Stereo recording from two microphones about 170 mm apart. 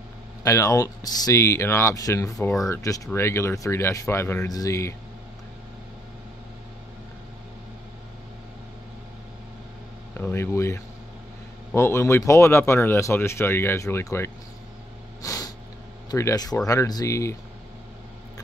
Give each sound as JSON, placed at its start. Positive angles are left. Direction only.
{"t": 0.4, "sound": "speech", "side_deg": 20}
{"t": 10.1, "sound": "speech", "side_deg": 15}
{"t": 15.2, "sound": "snort", "side_deg": 20}
{"t": 16.1, "sound": "speech", "side_deg": 20}